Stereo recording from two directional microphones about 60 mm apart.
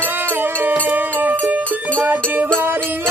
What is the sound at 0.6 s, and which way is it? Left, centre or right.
Music, right.